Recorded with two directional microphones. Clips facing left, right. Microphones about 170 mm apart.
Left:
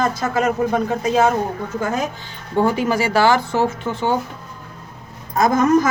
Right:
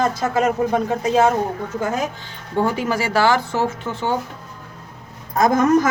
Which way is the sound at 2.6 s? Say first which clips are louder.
Left 3 dB; 20° left (ahead or behind).